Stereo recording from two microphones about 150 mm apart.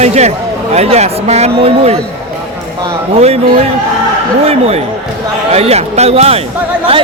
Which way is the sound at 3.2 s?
45° right (ahead or behind).